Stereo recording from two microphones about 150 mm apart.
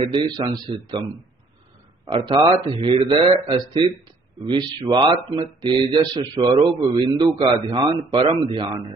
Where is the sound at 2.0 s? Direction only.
35° right (ahead or behind).